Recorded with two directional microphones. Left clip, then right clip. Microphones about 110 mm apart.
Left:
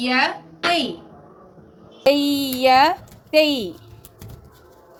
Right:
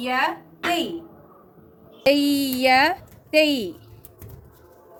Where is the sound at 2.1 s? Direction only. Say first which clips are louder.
Left 2 dB; 20° right (ahead or behind).